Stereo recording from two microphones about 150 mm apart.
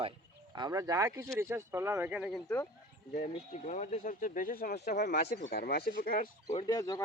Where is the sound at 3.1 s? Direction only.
55° left (ahead or behind); by 6.3 s 75° left (ahead or behind).